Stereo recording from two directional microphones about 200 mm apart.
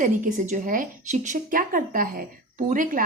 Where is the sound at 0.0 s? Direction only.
40° right (ahead or behind).